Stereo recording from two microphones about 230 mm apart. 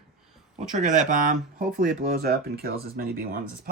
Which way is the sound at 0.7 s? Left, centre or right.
Right.